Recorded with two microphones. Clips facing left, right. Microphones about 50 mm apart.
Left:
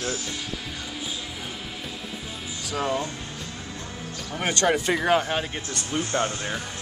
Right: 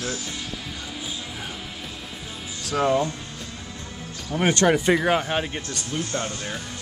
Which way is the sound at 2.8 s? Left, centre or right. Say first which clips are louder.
Right 6 dB; centre.